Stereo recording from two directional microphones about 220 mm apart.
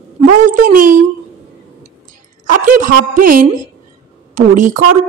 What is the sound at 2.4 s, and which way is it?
A child's voice, 35° right (ahead or behind).